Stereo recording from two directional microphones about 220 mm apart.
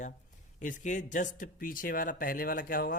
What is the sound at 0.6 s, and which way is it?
Speech, 35° left (ahead or behind).